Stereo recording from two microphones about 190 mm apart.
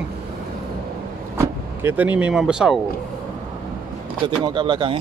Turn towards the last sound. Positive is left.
turn(degrees=-25)  # may be behind; listen again after turning